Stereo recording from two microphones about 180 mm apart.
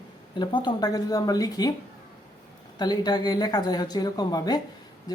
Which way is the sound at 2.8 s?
20° left (ahead or behind).